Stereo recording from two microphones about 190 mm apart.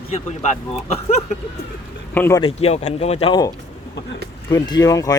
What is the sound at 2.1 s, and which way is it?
Speech, 10° left (ahead or behind).